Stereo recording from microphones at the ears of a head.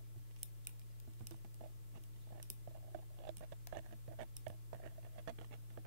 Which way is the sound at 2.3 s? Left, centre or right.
Right.